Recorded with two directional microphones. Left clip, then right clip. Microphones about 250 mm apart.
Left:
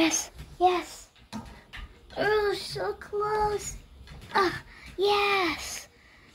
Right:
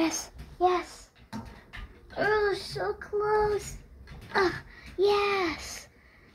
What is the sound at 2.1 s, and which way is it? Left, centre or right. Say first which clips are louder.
A child's voice: even; left.